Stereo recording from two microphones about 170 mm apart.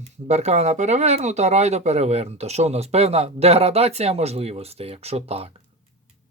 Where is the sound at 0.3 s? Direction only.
40° right (ahead or behind).